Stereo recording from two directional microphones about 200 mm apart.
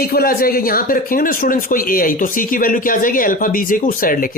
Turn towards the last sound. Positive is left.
turn(degrees=45)  # may be behind; listen again after turning